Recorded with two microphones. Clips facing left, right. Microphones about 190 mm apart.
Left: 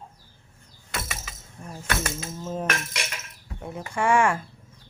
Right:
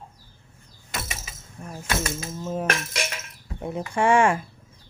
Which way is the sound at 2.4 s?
5° right (ahead or behind).